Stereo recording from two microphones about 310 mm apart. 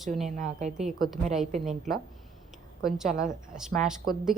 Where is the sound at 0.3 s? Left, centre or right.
Right.